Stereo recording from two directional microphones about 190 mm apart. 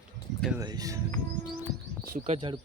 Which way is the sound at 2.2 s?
35° right (ahead or behind).